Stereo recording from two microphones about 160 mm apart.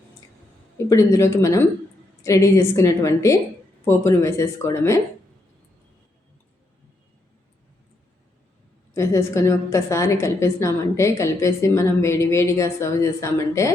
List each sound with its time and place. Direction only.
0.9 s a woman's voice: 20° left (ahead or behind)
8.9 s a woman's voice: 20° left (ahead or behind)